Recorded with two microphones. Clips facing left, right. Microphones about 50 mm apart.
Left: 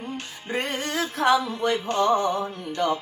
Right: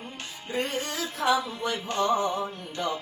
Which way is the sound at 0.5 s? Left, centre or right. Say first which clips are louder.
Left 3 dB; left.